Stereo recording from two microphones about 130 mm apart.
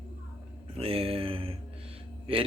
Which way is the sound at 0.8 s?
45° right (ahead or behind).